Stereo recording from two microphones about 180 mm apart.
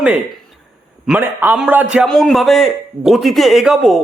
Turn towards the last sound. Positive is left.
turn(degrees=0)  # may be behind; listen again after turning